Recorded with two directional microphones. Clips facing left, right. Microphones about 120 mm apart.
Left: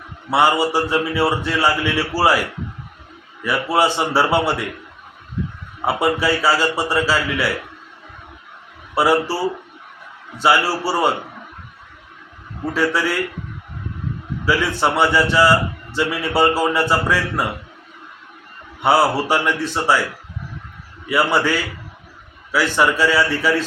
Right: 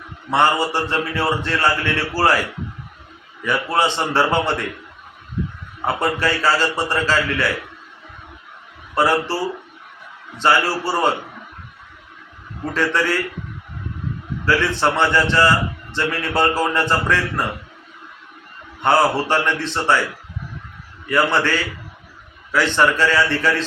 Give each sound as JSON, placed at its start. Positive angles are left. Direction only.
{"t": 0.3, "sound": "a man's voice", "side_deg": 10}
{"t": 3.4, "sound": "a man's voice", "side_deg": 10}
{"t": 5.8, "sound": "a man's voice", "side_deg": 10}
{"t": 9.0, "sound": "a man's voice", "side_deg": 10}
{"t": 10.3, "sound": "a man's voice", "side_deg": 10}
{"t": 12.7, "sound": "a man's voice", "side_deg": 5}
{"t": 14.4, "sound": "a man's voice", "side_deg": 10}
{"t": 18.8, "sound": "a man's voice", "side_deg": 10}
{"t": 21.1, "sound": "a man's voice", "side_deg": 10}